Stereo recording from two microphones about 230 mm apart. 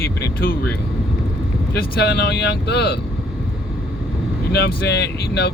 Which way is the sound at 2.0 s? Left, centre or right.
Left.